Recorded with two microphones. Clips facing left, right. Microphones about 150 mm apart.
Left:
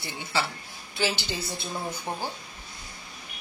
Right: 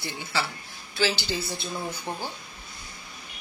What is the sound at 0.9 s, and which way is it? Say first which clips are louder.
Speech: right 2 dB; 20° left (ahead or behind).